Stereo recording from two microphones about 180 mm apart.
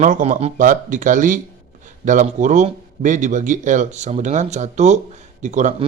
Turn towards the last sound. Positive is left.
turn(degrees=-40)  # may be behind; listen again after turning